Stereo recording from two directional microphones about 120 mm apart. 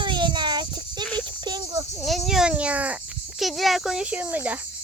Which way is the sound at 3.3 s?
Centre (ahead or behind).